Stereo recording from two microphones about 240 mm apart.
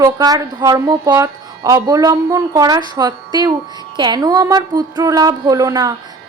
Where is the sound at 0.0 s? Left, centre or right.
Centre.